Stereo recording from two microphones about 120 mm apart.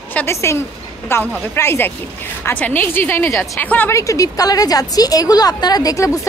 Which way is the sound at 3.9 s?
25° left (ahead or behind).